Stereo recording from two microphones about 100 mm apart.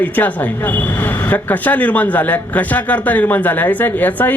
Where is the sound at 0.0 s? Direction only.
20° left (ahead or behind).